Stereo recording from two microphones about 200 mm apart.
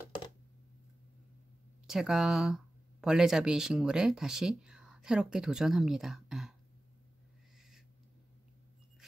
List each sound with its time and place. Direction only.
1.9 s speech: centre (ahead or behind)